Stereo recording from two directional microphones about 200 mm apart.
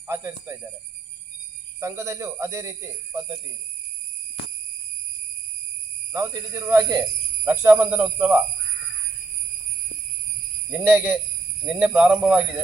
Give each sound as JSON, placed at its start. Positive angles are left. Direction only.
{"t": 0.1, "sound": "speech", "side_deg": -15}
{"t": 1.8, "sound": "speech", "side_deg": -15}
{"t": 6.1, "sound": "speech", "side_deg": -15}
{"t": 10.7, "sound": "speech", "side_deg": -10}